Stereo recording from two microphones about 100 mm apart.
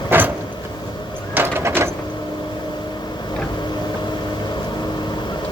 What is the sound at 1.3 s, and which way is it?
Sliding door, 20° right (ahead or behind).